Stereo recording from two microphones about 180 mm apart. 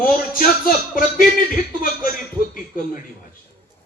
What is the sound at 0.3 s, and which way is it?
Speech, 50° left (ahead or behind).